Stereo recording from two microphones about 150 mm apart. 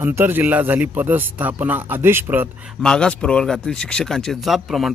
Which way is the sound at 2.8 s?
5° left (ahead or behind).